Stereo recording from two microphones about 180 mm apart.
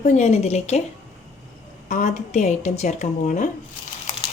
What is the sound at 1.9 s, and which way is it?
Speech, 45° left (ahead or behind).